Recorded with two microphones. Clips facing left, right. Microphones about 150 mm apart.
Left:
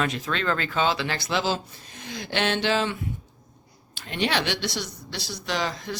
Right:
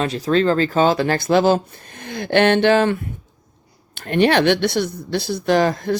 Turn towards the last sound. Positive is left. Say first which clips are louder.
# right 12 dB
turn(degrees=-50)  # may be behind; listen again after turning